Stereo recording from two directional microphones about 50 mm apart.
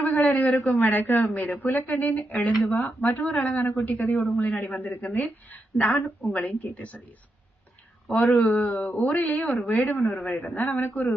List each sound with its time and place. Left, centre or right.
0.0 s a man's voice: left
8.1 s speech: left